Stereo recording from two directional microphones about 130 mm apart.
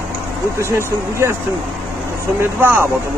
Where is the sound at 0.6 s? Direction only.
20° right (ahead or behind).